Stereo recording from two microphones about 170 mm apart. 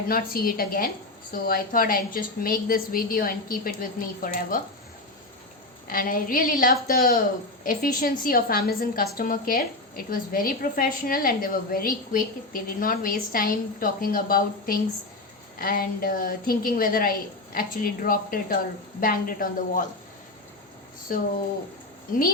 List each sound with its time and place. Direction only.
0.1 s a woman's voice: 60° left (ahead or behind)
5.9 s a woman's voice: 55° left (ahead or behind)
21.1 s a woman's voice: 55° left (ahead or behind)